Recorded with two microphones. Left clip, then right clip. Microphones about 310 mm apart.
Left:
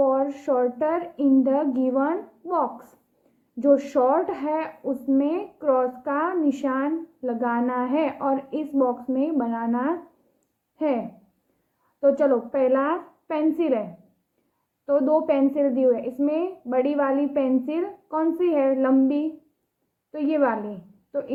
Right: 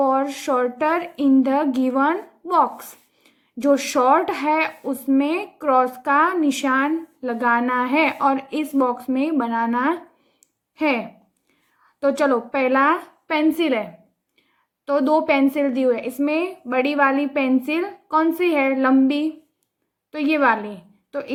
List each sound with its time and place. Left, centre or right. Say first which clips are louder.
0.0 s speech: right 2 dB; right
15.1 s a woman's voice: right 3 dB; right